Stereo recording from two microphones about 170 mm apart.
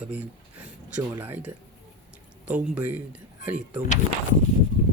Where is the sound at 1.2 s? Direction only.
10° right (ahead or behind).